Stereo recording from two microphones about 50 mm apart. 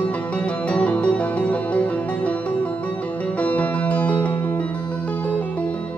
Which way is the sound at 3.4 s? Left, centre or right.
Left.